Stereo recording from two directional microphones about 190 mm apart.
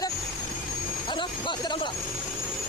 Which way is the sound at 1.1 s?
25° left (ahead or behind).